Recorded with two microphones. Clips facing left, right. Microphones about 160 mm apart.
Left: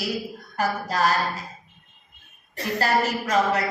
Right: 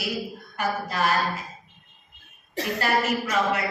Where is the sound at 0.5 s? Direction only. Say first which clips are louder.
Left 3 dB; 40° left (ahead or behind).